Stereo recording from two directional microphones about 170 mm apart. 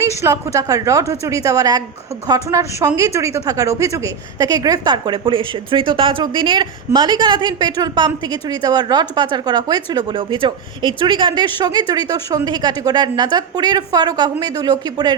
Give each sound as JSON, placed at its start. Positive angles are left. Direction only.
{"t": 0.0, "sound": "a woman's voice", "side_deg": -15}